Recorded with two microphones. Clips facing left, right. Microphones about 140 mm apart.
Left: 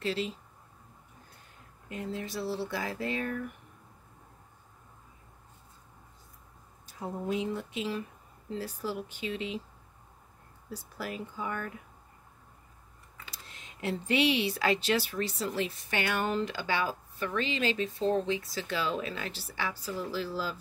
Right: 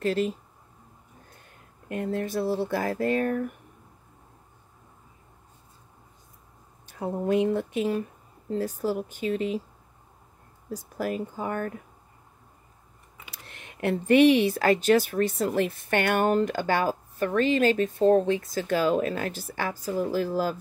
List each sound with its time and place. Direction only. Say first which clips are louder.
0.0 s speech: right 7 dB; 50° right (ahead or behind)
1.9 s speech: right 8 dB; 55° right (ahead or behind)
6.9 s speech: right 8 dB; 60° right (ahead or behind); by 9.6 s 45° right (ahead or behind)
10.7 s speech: right 8 dB; 45° right (ahead or behind)
13.3 s speech: right 5 dB; 60° right (ahead or behind)